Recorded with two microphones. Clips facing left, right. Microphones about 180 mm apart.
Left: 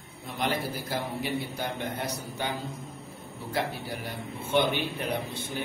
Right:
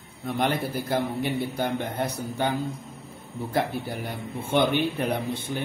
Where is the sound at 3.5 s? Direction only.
55° right (ahead or behind).